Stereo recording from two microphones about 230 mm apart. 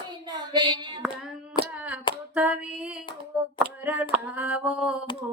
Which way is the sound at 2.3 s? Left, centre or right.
Centre.